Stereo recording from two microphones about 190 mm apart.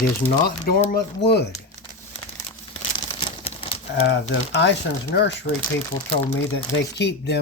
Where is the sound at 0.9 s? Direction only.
60° left (ahead or behind).